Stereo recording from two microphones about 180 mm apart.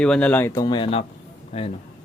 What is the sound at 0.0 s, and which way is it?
Speech, 5° left (ahead or behind).